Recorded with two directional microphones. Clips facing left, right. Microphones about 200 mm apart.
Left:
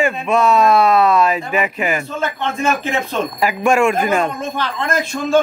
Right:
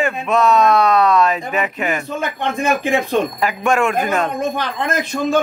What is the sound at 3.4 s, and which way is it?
Speech, 5° left (ahead or behind).